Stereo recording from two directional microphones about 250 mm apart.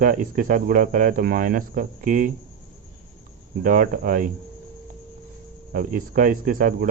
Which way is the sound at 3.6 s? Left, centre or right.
Right.